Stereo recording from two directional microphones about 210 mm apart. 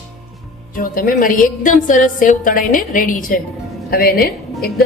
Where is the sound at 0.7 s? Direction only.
45° left (ahead or behind).